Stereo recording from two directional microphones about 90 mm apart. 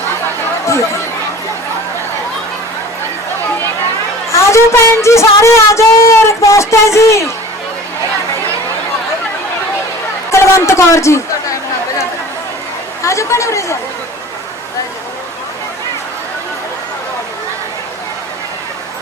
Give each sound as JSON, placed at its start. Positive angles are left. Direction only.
{"t": 4.3, "sound": "speech", "side_deg": 30}
{"t": 10.3, "sound": "speech", "side_deg": 35}
{"t": 13.0, "sound": "speech", "side_deg": 35}